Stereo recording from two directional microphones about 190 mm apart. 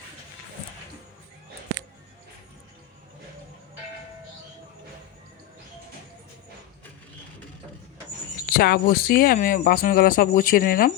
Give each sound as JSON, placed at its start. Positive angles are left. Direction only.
{"t": 8.4, "sound": "speech", "side_deg": 50}